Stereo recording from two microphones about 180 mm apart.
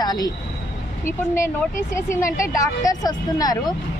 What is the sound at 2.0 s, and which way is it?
A woman's voice, 15° left (ahead or behind).